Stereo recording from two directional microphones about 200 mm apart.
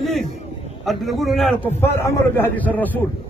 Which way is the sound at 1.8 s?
15° left (ahead or behind).